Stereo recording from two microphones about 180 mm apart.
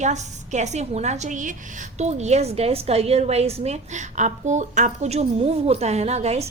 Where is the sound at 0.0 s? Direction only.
40° right (ahead or behind).